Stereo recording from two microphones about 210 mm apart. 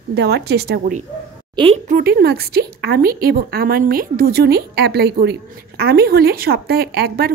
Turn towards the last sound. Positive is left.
turn(degrees=-50)  # may be behind; listen again after turning